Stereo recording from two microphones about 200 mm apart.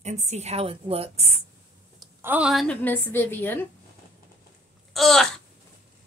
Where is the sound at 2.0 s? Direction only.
10° right (ahead or behind); by 3.7 s 10° left (ahead or behind).